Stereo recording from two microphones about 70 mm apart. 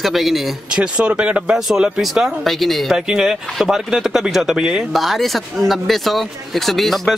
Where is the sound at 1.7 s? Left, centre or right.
Centre.